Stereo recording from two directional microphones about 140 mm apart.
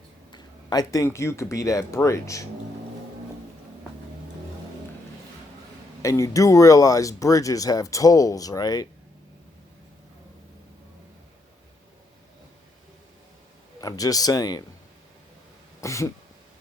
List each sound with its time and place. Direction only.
0.3 s speech: 30° left (ahead or behind)
6.0 s speech: 20° left (ahead or behind)
13.8 s speech: 25° left (ahead or behind)
15.8 s speech: 20° left (ahead or behind)